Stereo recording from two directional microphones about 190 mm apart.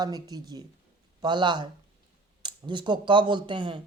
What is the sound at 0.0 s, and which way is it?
Speech, 20° right (ahead or behind).